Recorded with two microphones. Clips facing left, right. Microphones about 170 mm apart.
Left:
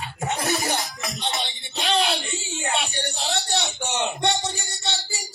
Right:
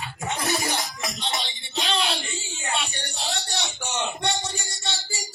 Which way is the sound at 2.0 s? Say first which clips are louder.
Left 3 dB; 70° left (ahead or behind).